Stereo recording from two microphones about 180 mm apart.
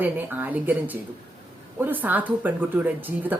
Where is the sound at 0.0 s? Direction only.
10° right (ahead or behind).